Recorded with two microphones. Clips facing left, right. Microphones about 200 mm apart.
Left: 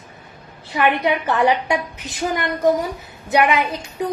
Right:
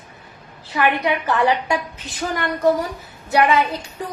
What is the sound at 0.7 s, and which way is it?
A woman's voice, 20° left (ahead or behind).